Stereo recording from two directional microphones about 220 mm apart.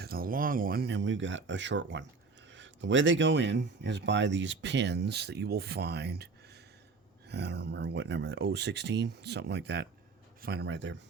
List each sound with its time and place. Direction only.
0.0 s speech: 40° right (ahead or behind)